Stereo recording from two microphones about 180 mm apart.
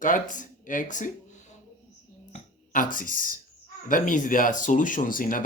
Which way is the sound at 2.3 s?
50° left (ahead or behind).